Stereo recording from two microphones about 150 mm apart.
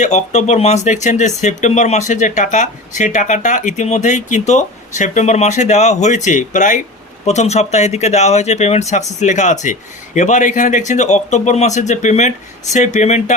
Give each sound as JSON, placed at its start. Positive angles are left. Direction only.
{"t": 0.0, "sound": "speech", "side_deg": 50}